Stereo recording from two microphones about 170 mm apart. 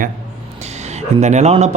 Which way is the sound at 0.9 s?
40° right (ahead or behind).